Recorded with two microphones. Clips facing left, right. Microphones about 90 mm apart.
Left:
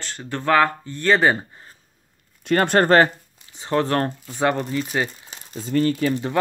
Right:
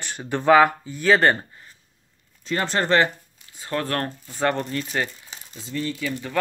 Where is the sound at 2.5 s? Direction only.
55° left (ahead or behind).